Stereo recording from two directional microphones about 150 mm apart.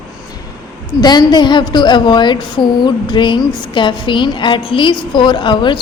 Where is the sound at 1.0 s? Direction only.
30° left (ahead or behind).